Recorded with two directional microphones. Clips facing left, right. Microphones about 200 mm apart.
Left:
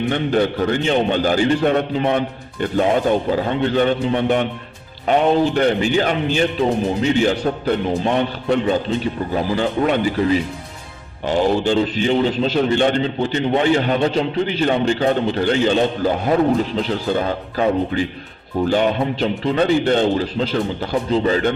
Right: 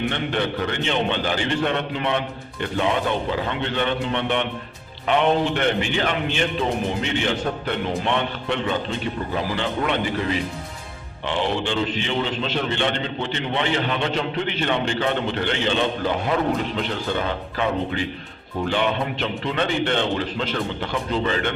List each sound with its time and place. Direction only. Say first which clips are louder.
0.1 s a man's voice: left 7 dB; 40° left (ahead or behind)
11.3 s a man's voice: left 7 dB; 40° left (ahead or behind)